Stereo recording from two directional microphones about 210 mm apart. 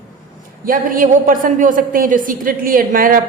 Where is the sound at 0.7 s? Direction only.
40° right (ahead or behind).